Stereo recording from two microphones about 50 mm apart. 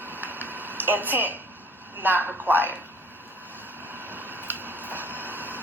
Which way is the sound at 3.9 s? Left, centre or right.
Right.